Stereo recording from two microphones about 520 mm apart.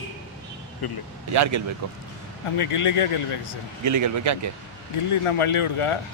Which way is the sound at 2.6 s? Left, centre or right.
Left.